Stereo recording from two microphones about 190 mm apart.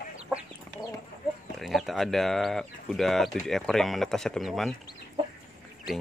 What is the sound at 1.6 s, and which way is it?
Speech, centre (ahead or behind).